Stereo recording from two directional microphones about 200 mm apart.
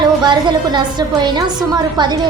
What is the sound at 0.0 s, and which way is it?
A woman's voice, 20° right (ahead or behind).